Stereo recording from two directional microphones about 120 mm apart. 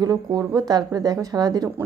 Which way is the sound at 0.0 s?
30° right (ahead or behind).